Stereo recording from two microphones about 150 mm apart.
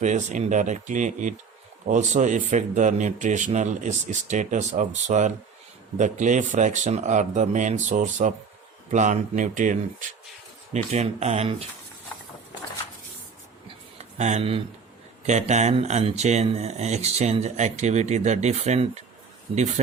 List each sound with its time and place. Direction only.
0.0 s speech: 55° right (ahead or behind)
10.7 s speech: 45° right (ahead or behind)
14.0 s speech: 50° right (ahead or behind)